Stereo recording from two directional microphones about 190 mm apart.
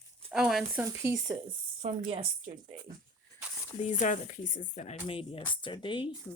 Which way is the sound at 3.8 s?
40° left (ahead or behind).